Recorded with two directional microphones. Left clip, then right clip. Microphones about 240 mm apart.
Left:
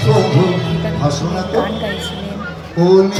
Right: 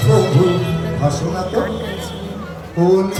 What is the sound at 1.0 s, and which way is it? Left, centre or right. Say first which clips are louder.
Music: even; right.